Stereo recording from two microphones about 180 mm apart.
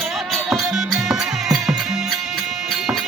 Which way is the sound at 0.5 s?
Centre (ahead or behind).